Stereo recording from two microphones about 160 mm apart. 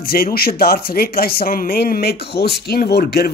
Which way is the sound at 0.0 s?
70° left (ahead or behind).